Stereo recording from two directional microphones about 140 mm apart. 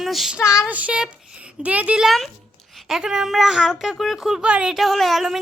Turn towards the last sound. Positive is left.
turn(degrees=0)  # may be behind; listen again after turning